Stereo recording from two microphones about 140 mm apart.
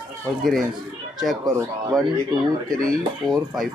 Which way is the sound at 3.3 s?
Centre (ahead or behind).